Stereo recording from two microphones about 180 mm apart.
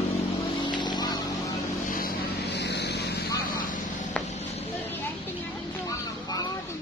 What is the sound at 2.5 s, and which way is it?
Vehicle, 70° left (ahead or behind).